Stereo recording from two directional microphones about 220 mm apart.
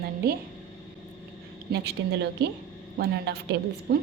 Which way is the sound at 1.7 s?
50° right (ahead or behind).